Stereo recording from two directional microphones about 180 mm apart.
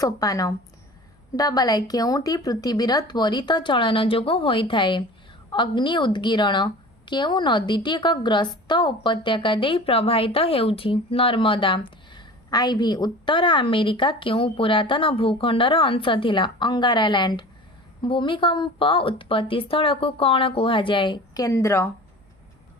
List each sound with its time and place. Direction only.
0.0 s a woman's voice: 20° left (ahead or behind)